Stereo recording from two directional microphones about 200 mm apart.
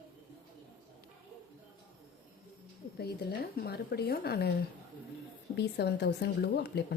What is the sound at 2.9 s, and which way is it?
Speech, 55° left (ahead or behind).